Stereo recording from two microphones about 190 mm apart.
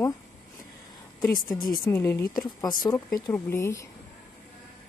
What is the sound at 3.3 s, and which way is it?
Speech, 15° left (ahead or behind).